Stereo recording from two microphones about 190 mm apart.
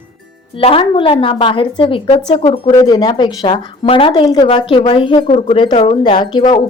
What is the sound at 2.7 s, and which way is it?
A woman's voice, 20° left (ahead or behind).